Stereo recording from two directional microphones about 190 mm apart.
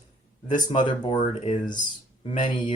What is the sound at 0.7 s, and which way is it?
Speech, 25° left (ahead or behind).